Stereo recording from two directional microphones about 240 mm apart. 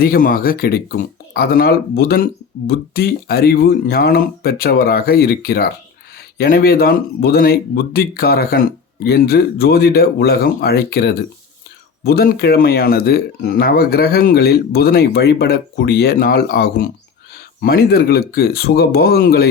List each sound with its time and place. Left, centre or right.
0.0 s speech: left